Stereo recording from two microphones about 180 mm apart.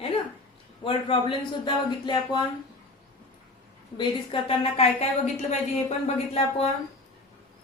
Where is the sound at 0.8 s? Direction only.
30° left (ahead or behind).